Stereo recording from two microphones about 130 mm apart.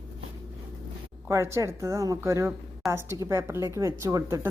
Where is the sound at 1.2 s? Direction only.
20° right (ahead or behind).